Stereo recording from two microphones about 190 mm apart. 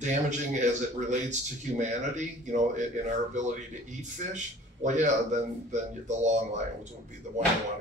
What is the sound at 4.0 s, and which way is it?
A man's voice, 40° right (ahead or behind).